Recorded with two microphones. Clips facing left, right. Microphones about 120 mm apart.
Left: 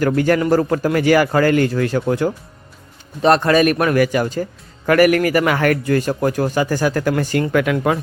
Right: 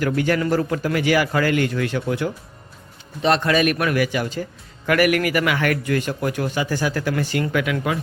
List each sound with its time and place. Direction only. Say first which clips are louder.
0.2 s a man's voice: left 4 dB; 40° left (ahead or behind)